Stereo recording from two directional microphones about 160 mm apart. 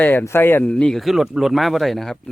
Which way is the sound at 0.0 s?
10° left (ahead or behind).